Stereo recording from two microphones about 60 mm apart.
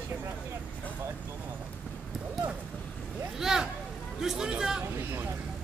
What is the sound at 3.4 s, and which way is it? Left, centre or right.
Vehicle, centre.